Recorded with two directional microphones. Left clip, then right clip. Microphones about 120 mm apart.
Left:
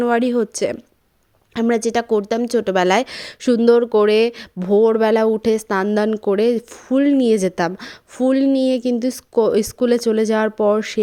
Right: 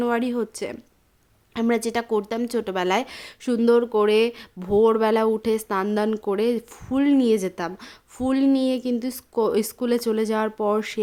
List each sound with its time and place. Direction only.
0.0 s a woman's voice: 35° left (ahead or behind)
2.7 s a woman's voice: 40° left (ahead or behind)
4.6 s a woman's voice: 25° left (ahead or behind); by 7.9 s 40° left (ahead or behind)
8.2 s a woman's voice: 30° left (ahead or behind)